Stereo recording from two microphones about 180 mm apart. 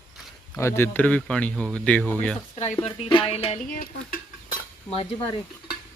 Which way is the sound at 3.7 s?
50° left (ahead or behind).